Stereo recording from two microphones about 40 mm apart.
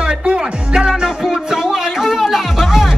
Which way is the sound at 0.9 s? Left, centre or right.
Centre.